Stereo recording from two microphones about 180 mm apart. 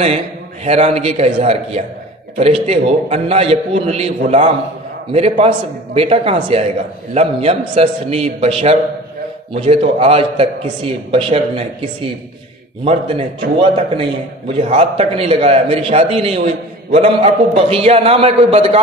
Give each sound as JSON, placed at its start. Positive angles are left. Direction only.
{"t": 0.7, "sound": "a man's voice", "side_deg": -35}